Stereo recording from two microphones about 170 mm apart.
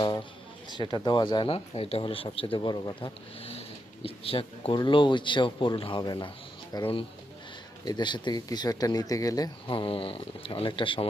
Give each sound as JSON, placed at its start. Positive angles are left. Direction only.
{"t": 0.7, "sound": "speech", "side_deg": 25}